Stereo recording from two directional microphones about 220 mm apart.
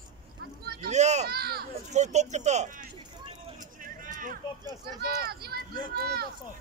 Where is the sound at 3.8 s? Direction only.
35° right (ahead or behind).